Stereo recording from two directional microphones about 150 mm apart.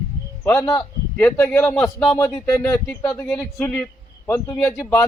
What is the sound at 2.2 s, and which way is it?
Speech, 20° left (ahead or behind).